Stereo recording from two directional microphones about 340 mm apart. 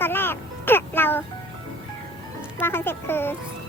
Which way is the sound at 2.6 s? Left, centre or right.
Centre.